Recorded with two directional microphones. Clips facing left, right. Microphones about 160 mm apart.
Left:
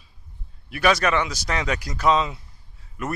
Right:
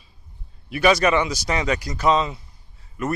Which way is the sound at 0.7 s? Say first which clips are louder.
Right 3 dB; centre (ahead or behind).